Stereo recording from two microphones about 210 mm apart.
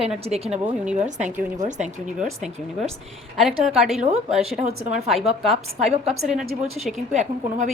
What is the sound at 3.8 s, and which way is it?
Speech, centre (ahead or behind).